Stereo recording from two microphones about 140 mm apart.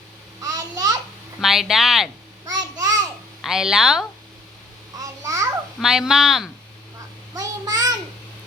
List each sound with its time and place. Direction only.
0.4 s a sound: 25° right (ahead or behind)
1.4 s speech: centre (ahead or behind)
2.5 s a sound: 25° right (ahead or behind)
3.4 s speech: 5° right (ahead or behind)
4.9 s babbling: 25° right (ahead or behind)
5.8 s speech: 5° right (ahead or behind)
7.3 s child singing: 25° right (ahead or behind)